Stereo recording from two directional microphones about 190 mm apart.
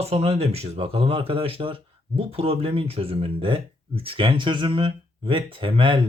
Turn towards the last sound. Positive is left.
turn(degrees=-25)  # may be behind; listen again after turning